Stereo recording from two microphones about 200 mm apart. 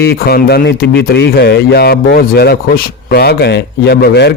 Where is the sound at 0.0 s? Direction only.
50° left (ahead or behind).